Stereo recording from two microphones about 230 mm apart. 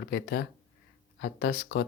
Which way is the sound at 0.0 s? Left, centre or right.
Left.